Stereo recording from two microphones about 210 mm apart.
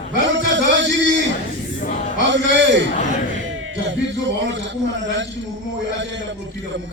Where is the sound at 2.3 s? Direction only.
60° right (ahead or behind).